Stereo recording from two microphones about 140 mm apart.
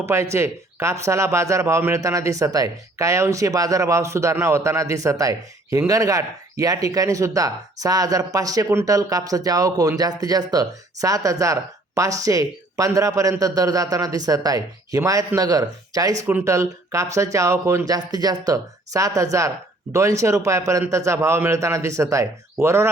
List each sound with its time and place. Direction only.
0.0 s speech: 20° right (ahead or behind)